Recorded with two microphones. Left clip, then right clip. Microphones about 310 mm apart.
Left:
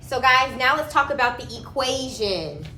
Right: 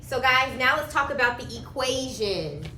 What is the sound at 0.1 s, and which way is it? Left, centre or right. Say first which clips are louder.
A woman's voice: left 4 dB; centre.